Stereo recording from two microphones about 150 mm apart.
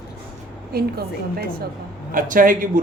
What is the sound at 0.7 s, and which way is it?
Speech, 90° right.